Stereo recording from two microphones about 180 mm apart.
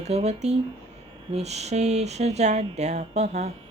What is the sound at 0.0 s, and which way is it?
A woman's voice, 35° right (ahead or behind).